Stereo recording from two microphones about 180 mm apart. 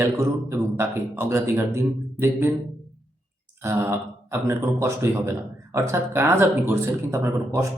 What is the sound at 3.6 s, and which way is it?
Speech, 10° right (ahead or behind).